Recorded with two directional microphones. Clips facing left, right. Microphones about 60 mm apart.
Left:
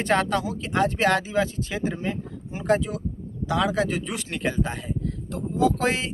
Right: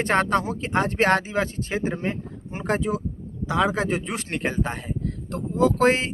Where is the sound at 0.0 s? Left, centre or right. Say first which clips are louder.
Right 1 dB; right.